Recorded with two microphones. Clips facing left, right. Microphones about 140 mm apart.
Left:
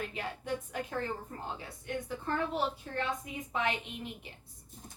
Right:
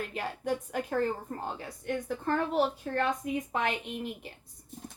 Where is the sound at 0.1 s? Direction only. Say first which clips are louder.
Right 4 dB; 50° right (ahead or behind).